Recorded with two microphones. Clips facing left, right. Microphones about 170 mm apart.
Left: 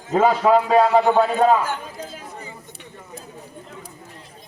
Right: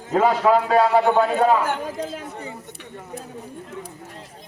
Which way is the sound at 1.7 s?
65° right (ahead or behind).